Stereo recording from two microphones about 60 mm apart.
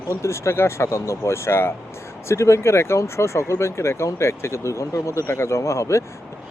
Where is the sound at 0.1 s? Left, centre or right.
Left.